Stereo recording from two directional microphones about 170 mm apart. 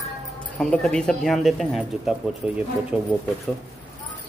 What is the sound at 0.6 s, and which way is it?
Speech, 5° left (ahead or behind).